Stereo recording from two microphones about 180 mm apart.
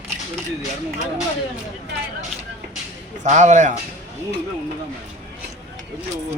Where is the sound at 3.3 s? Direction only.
40° right (ahead or behind).